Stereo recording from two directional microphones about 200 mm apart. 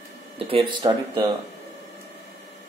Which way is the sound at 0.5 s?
25° right (ahead or behind).